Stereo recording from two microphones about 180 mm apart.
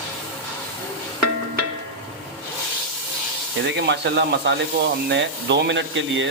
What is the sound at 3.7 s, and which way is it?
Speech, 75° right (ahead or behind).